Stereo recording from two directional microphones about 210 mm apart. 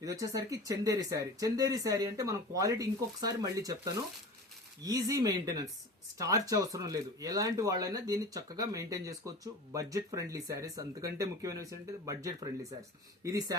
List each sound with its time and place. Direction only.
0.0 s speech: 15° right (ahead or behind)